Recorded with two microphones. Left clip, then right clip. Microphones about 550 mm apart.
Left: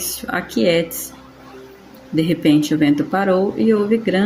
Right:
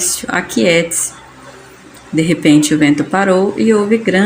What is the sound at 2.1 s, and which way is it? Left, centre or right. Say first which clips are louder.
Speech: right 5 dB; left.